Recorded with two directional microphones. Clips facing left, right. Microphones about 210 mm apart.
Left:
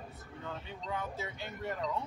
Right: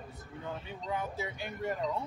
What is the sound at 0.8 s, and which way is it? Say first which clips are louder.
A man's voice: right 3 dB; 10° right (ahead or behind).